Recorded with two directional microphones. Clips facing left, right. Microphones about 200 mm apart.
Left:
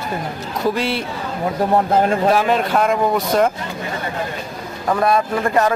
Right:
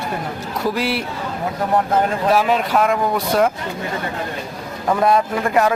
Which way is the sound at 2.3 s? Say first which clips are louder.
Even; 5° right (ahead or behind).